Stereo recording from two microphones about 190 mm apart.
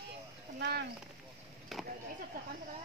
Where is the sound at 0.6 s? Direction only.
60° right (ahead or behind).